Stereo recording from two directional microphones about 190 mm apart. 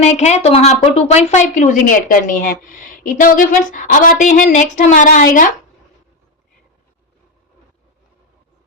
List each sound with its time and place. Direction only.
0.0 s a woman's voice: 35° left (ahead or behind)